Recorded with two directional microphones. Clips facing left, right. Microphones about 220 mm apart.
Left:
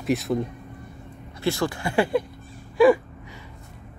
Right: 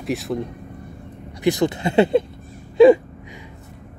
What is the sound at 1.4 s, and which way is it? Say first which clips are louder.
Speech: right 6 dB; 20° right (ahead or behind).